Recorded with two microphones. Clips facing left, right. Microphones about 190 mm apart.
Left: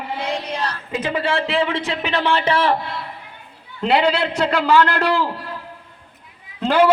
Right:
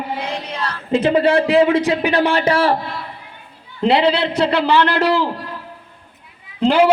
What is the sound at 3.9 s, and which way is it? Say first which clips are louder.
A man's voice: right 2 dB; 30° right (ahead or behind).